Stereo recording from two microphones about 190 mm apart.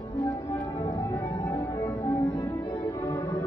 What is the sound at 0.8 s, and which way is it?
Music, 25° left (ahead or behind).